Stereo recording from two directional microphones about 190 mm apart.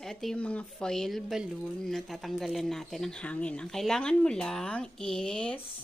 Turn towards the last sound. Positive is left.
turn(degrees=5)  # may be behind; listen again after turning